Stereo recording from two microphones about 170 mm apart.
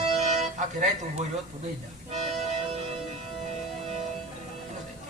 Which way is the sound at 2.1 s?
45° right (ahead or behind).